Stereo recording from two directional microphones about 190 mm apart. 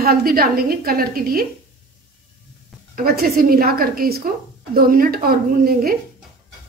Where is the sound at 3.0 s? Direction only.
50° right (ahead or behind).